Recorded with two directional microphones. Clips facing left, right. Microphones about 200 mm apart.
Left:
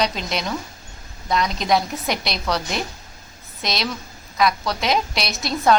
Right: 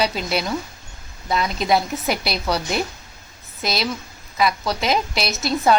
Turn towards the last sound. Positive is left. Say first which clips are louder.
# even
turn(degrees=-5)  # may be behind; listen again after turning